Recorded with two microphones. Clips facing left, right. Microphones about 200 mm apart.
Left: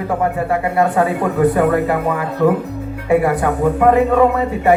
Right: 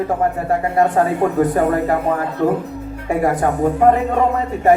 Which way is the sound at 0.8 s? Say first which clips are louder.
Right 1 dB; 45° right (ahead or behind).